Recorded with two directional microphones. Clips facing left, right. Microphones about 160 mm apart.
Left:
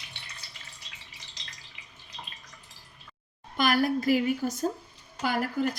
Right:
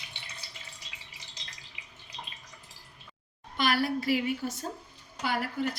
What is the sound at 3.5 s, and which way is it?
A woman's voice, 45° left (ahead or behind).